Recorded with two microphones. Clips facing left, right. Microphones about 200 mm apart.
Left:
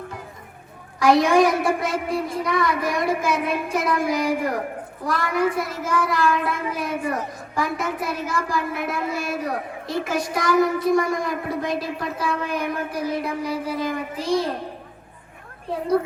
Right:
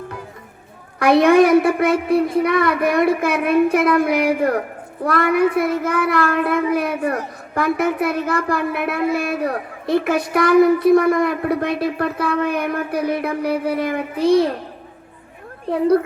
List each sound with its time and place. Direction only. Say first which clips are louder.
0.9 s speech: right 4 dB; 60° right (ahead or behind)